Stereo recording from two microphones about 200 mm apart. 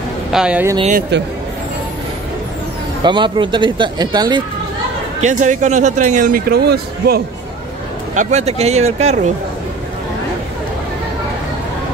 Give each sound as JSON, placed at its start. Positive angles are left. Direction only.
{"t": 0.3, "sound": "speech", "side_deg": -5}
{"t": 1.1, "sound": "speech", "side_deg": -60}
{"t": 3.0, "sound": "speech", "side_deg": -25}
{"t": 5.2, "sound": "a man's voice", "side_deg": -40}
{"t": 8.1, "sound": "a man's voice", "side_deg": -35}